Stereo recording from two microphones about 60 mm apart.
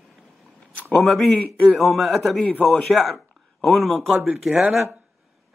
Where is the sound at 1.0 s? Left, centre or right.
Centre.